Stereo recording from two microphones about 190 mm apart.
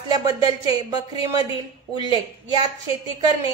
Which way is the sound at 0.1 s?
20° right (ahead or behind).